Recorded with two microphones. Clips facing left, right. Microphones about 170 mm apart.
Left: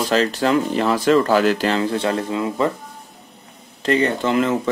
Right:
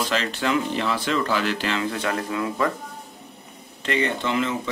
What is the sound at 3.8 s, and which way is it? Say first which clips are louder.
Speech: left 6 dB; 35° left (ahead or behind).